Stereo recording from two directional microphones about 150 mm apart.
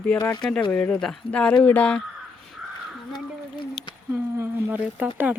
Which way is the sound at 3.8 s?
Centre (ahead or behind).